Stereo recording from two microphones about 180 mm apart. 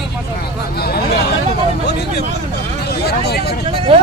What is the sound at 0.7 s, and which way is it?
Speech, 60° left (ahead or behind).